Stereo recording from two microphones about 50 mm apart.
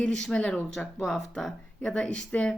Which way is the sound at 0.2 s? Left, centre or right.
Centre.